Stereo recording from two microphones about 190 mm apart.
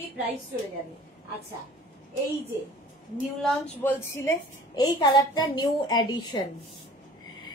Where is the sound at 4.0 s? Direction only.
15° left (ahead or behind).